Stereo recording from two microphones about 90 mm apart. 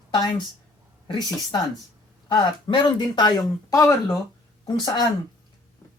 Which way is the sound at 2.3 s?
60° left (ahead or behind).